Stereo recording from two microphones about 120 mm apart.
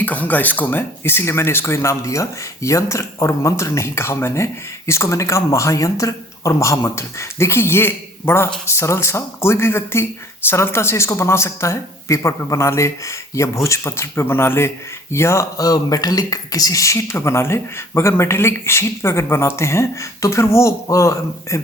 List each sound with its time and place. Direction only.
0.0 s speech: 15° left (ahead or behind)